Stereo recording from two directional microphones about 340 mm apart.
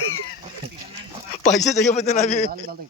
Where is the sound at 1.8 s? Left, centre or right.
Centre.